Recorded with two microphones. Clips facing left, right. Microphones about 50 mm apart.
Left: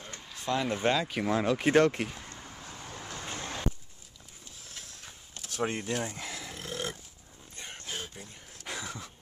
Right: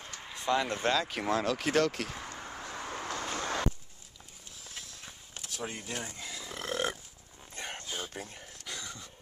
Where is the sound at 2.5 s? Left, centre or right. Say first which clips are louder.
Right 6 dB; right.